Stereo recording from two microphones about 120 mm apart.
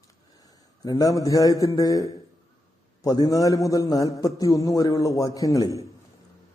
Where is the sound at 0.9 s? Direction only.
30° left (ahead or behind).